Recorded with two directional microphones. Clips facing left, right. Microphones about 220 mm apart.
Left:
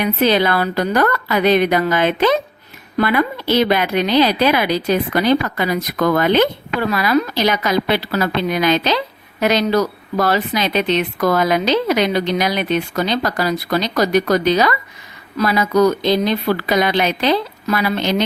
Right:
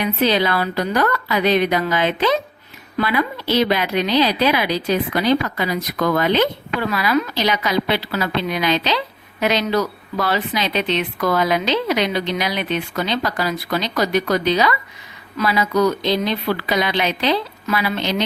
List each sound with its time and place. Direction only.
0.0 s a woman's voice: 50° left (ahead or behind)